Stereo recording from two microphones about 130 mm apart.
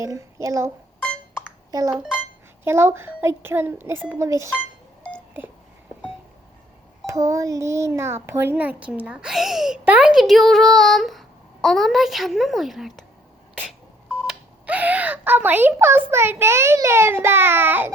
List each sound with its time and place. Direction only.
0.0 s a child's voice: 25° right (ahead or behind)
1.7 s a child's voice: 30° right (ahead or behind)
2.6 s a child's voice: 20° right (ahead or behind)
7.1 s a child's voice: 25° right (ahead or behind); by 13.1 s centre (ahead or behind)
14.1 s a child's voice: 5° right (ahead or behind)